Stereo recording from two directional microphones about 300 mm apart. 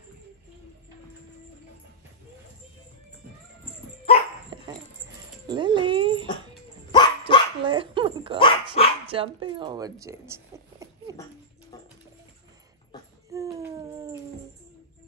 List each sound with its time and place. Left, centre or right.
5.5 s dog: centre
6.9 s dog: centre
7.6 s dog: centre
8.4 s dog: centre
9.1 s a woman's voice: centre
10.5 s a sound: centre
11.7 s music: centre
13.3 s a sound: centre